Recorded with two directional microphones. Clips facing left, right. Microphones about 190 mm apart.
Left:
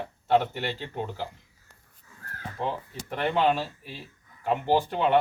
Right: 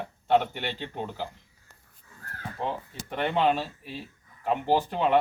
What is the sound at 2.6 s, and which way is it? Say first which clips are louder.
A man's voice: left 1 dB; centre (ahead or behind).